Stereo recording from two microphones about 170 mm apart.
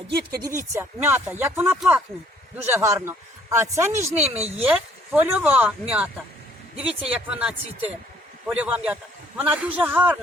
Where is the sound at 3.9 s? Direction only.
40° right (ahead or behind).